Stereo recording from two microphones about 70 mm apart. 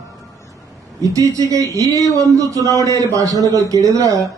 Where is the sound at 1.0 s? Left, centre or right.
Right.